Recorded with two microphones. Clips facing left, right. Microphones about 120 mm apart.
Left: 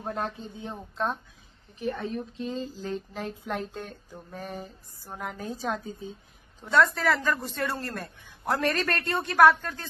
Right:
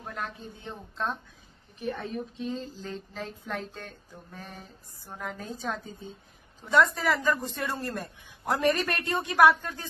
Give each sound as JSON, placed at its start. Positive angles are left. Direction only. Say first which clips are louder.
{"t": 0.0, "sound": "a man's voice", "louder": "left 5 dB", "side_deg": 35}
{"t": 1.8, "sound": "speech", "louder": "left 2 dB", "side_deg": 0}
{"t": 6.7, "sound": "a man's voice", "louder": "left 1 dB", "side_deg": -15}